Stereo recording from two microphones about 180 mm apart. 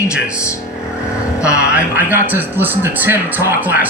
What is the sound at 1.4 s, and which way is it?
A man's voice, 5° right (ahead or behind).